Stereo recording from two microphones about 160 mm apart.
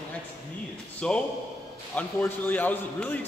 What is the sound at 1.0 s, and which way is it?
A man's voice, 5° left (ahead or behind).